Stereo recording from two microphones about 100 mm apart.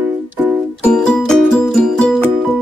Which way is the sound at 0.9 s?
10° left (ahead or behind).